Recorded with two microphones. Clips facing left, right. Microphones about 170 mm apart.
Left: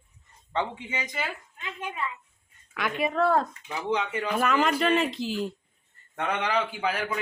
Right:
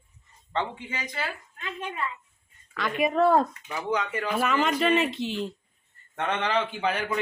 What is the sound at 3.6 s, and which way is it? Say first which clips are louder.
Speech: even; 20° left (ahead or behind).